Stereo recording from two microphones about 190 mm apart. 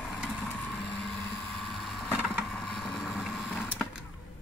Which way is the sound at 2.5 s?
Centre (ahead or behind).